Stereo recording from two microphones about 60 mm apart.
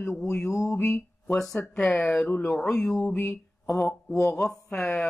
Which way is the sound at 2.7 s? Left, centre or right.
Centre.